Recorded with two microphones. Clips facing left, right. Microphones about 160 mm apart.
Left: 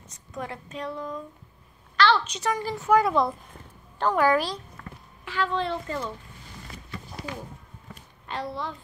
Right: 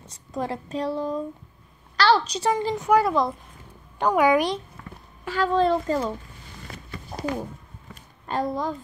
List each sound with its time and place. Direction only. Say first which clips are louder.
0.0 s a woman's voice: right 6 dB; 30° right (ahead or behind)
2.9 s speech: even; centre (ahead or behind)
4.0 s a woman's voice: right 3 dB; 10° right (ahead or behind)
5.2 s speech: right 6 dB; 40° right (ahead or behind)
6.7 s a sound: right 5 dB; 70° right (ahead or behind)
7.2 s a woman's voice: right 10 dB; 40° right (ahead or behind)